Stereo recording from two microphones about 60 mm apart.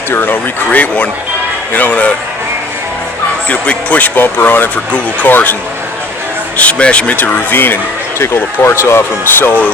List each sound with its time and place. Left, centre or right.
0.1 s speech: left
0.7 s speech: left
3.5 s speech: left
6.6 s speech: centre
8.2 s speech: left